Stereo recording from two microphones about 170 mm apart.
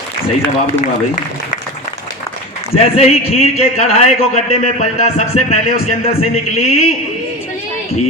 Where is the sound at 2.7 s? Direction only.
40° left (ahead or behind).